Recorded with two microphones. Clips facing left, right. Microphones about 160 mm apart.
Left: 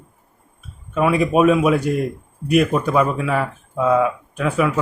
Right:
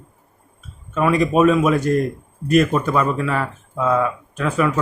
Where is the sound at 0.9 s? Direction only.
10° left (ahead or behind).